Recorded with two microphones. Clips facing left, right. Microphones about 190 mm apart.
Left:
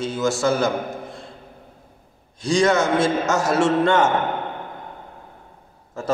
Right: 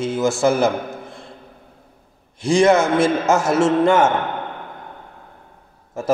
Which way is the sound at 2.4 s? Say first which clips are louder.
Right 4 dB; 25° right (ahead or behind).